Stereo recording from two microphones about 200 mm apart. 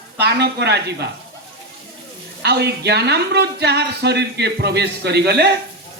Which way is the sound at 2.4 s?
55° right (ahead or behind).